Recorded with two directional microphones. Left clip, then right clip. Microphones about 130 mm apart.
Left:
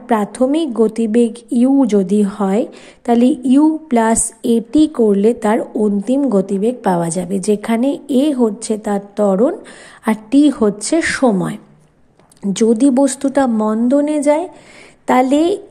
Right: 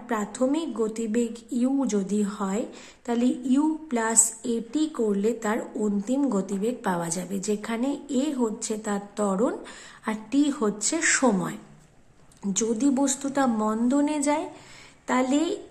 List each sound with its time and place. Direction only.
0.0 s a woman's voice: 50° left (ahead or behind)
9.6 s a woman's voice: 45° left (ahead or behind)
15.0 s a woman's voice: 55° left (ahead or behind)